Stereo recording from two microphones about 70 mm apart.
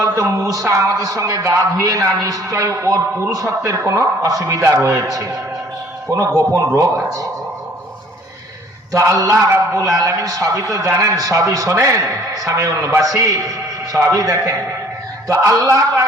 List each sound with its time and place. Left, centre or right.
0.0 s a man's voice: right
8.9 s a man's voice: right